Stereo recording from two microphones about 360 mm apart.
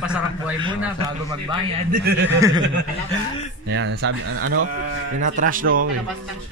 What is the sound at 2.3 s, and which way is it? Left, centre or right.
Speech, centre.